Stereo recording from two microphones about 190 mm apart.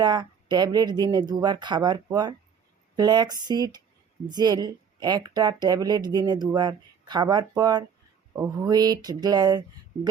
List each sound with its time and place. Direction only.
0.0 s a woman's voice: 20° right (ahead or behind)